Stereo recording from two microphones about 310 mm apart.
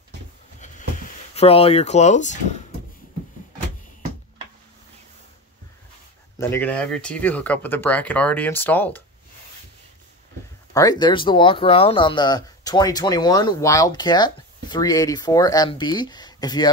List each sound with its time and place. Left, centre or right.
1.3 s speech: centre
6.3 s speech: centre
10.7 s speech: centre